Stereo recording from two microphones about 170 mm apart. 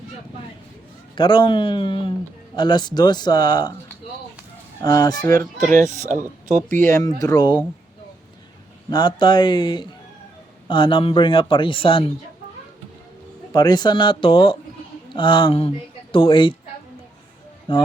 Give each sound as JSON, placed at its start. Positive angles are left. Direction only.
{"t": 1.1, "sound": "a man's voice", "side_deg": 25}
{"t": 4.8, "sound": "a man's voice", "side_deg": 20}
{"t": 5.7, "sound": "speech", "side_deg": -45}
{"t": 6.7, "sound": "a man's voice", "side_deg": 10}
{"t": 8.9, "sound": "a man's voice", "side_deg": 25}
{"t": 13.5, "sound": "a man's voice", "side_deg": 25}
{"t": 17.7, "sound": "speech", "side_deg": 30}